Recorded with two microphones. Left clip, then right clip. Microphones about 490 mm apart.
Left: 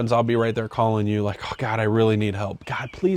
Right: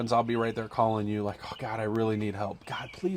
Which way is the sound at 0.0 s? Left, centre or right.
Left.